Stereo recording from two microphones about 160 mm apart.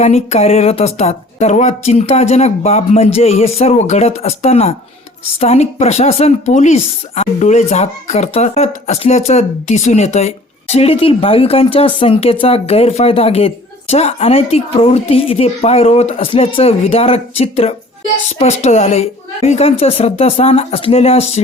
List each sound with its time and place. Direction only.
0.0 s speech: 40° left (ahead or behind)